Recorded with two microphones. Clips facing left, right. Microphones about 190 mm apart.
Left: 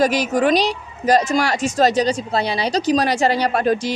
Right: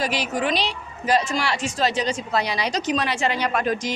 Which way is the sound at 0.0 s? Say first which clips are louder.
Left 8 dB; 45° left (ahead or behind).